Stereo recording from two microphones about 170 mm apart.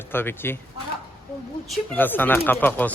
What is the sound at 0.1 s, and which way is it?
Speech, 15° left (ahead or behind).